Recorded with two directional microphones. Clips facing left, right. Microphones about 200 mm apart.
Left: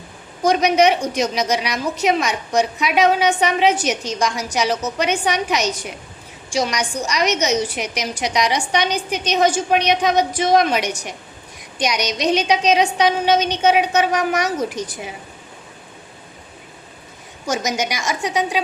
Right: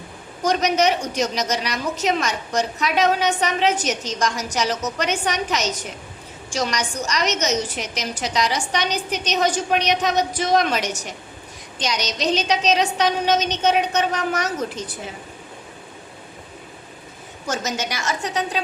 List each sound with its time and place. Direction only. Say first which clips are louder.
0.4 s a woman's voice: left 4 dB; 10° left (ahead or behind)
12.0 s a woman's voice: left 3 dB; 10° left (ahead or behind)
17.4 s a woman's voice: left 4 dB; 15° left (ahead or behind)